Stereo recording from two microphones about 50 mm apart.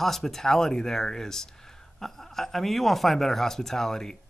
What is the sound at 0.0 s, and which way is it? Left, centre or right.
Speech, centre.